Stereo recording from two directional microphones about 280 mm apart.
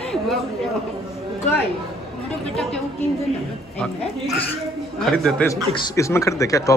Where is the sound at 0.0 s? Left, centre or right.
Centre.